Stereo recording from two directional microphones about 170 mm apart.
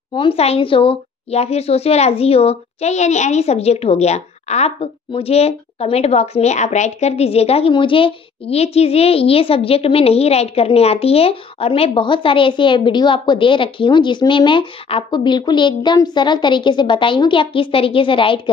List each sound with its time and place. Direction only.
0.1 s speech: 30° left (ahead or behind)